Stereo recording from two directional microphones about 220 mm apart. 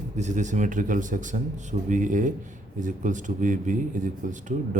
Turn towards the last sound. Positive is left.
turn(degrees=-35)  # may be behind; listen again after turning